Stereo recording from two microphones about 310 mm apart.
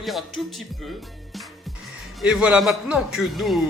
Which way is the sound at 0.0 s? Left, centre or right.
Centre.